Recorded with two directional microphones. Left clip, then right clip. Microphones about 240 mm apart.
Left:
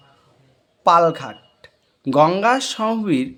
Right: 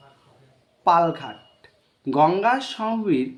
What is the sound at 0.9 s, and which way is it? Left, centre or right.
Speech, left.